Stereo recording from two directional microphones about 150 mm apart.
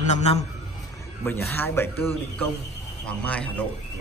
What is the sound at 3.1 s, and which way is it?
Speech, 10° left (ahead or behind).